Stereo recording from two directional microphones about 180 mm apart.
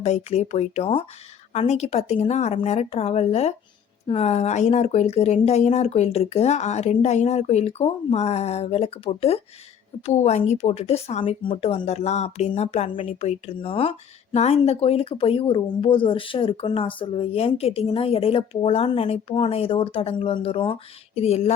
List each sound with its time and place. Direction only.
0.0 s speech: 35° left (ahead or behind)